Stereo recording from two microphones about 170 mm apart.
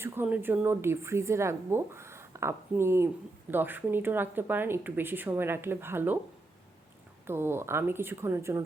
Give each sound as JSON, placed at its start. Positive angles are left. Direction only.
{"t": 0.0, "sound": "a woman's voice", "side_deg": -15}
{"t": 7.3, "sound": "a woman's voice", "side_deg": -15}